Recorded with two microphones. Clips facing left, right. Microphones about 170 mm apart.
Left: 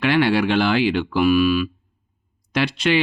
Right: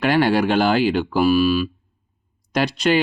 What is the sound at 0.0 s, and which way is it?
Speech, 45° right (ahead or behind).